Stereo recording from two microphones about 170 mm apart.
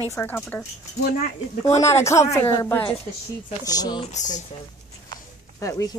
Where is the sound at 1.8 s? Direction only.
15° left (ahead or behind).